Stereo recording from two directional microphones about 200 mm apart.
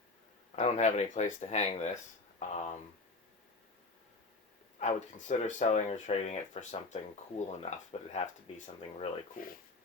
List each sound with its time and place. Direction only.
0.5 s speech: 35° left (ahead or behind)
4.8 s speech: 35° left (ahead or behind)